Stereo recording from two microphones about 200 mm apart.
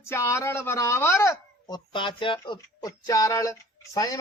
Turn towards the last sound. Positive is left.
turn(degrees=15)  # may be behind; listen again after turning